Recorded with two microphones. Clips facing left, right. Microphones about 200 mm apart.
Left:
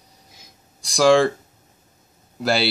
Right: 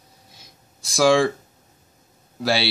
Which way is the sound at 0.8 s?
Centre (ahead or behind).